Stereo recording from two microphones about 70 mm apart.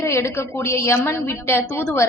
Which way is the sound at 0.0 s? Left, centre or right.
Left.